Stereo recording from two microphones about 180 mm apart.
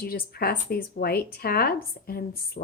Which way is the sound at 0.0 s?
55° left (ahead or behind).